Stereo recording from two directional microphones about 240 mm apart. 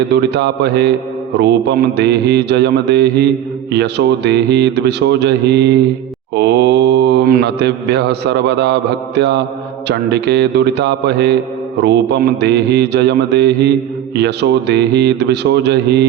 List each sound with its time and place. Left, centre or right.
0.1 s mantra: right